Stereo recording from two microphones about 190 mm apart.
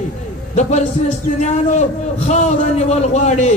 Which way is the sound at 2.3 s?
35° left (ahead or behind).